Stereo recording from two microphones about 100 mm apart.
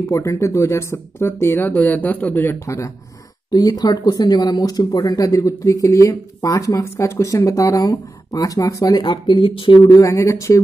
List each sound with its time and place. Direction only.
0.0 s speech: 35° left (ahead or behind)
1.7 s speech: 15° left (ahead or behind)
3.5 s speech: 40° left (ahead or behind)
9.0 s speech: 55° left (ahead or behind)
9.9 s speech: 30° left (ahead or behind)